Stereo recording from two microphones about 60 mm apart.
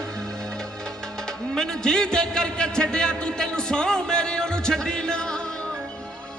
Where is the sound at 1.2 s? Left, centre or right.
Centre.